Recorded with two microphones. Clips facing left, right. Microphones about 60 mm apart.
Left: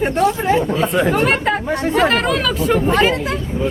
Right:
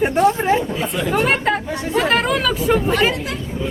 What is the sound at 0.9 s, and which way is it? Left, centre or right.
Speech, left.